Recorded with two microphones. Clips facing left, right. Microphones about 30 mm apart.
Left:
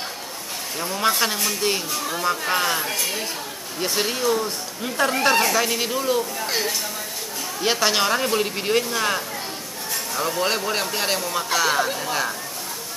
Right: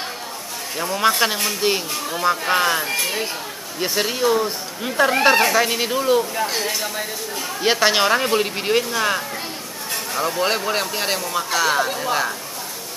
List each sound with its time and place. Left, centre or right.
0.7 s speech: centre
3.8 s speech: centre
6.4 s speech: centre
7.6 s speech: centre